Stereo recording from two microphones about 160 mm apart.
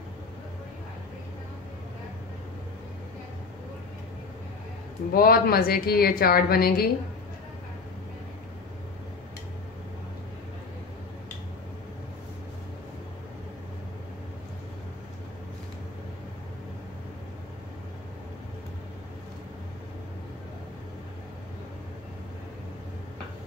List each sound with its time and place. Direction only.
5.1 s speech: 70° left (ahead or behind)